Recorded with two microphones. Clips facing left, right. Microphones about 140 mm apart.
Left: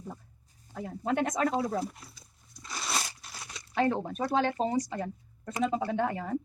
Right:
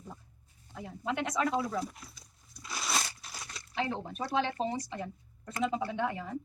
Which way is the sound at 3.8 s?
50° left (ahead or behind).